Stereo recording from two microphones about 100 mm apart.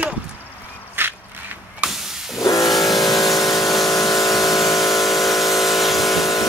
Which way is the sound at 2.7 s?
Centre (ahead or behind).